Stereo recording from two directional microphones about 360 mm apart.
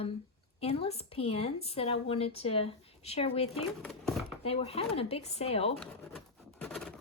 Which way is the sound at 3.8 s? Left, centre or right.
Centre.